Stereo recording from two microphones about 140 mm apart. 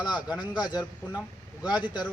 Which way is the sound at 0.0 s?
30° left (ahead or behind).